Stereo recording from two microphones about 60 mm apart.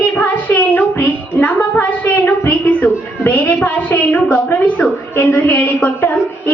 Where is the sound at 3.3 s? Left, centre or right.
Left.